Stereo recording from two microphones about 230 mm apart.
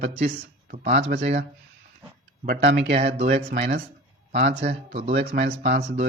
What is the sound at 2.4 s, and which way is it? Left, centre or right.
Speech, right.